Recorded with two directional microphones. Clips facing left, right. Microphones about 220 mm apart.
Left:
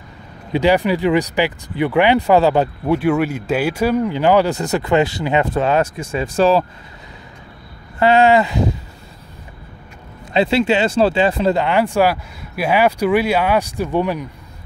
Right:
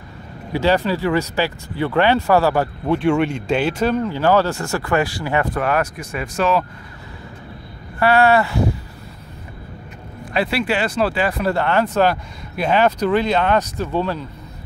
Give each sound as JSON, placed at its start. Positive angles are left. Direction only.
{"t": 0.5, "sound": "speech", "side_deg": 15}
{"t": 2.9, "sound": "speech", "side_deg": 5}
{"t": 8.0, "sound": "speech", "side_deg": 20}
{"t": 10.3, "sound": "speech", "side_deg": 25}